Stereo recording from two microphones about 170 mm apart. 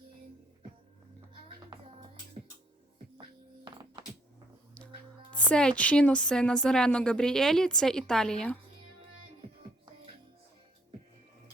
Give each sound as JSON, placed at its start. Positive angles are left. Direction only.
{"t": 1.3, "sound": "music", "side_deg": -30}
{"t": 3.2, "sound": "music", "side_deg": -25}
{"t": 5.3, "sound": "speech", "side_deg": 5}